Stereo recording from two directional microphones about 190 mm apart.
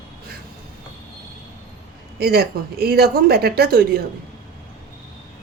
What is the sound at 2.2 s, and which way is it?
Speech, 55° right (ahead or behind).